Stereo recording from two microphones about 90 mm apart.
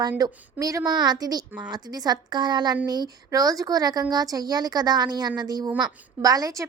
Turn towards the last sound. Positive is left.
turn(degrees=-40)  # may be behind; listen again after turning